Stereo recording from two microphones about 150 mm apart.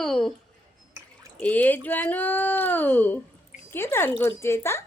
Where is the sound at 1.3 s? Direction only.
10° left (ahead or behind).